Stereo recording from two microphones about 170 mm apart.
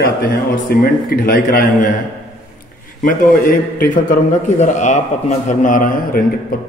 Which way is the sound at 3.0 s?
55° left (ahead or behind).